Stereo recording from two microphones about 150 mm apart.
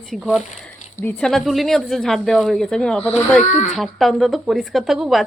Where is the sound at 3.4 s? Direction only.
55° left (ahead or behind).